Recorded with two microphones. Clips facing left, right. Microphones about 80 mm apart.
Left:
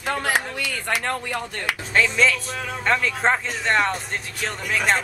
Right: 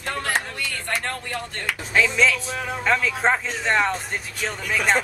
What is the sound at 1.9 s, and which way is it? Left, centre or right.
Speech, centre.